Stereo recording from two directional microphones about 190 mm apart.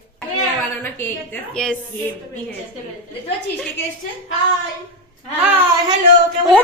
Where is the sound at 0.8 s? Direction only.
10° left (ahead or behind).